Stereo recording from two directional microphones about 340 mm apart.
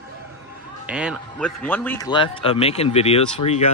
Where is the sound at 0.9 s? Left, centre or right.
Centre.